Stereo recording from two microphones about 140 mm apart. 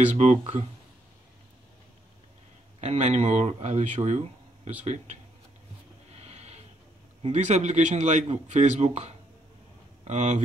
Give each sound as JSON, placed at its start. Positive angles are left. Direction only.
{"t": 0.1, "sound": "speech", "side_deg": -50}
{"t": 2.8, "sound": "a man's voice", "side_deg": -50}
{"t": 6.2, "sound": "a sound", "side_deg": -50}
{"t": 7.2, "sound": "a man's voice", "side_deg": -55}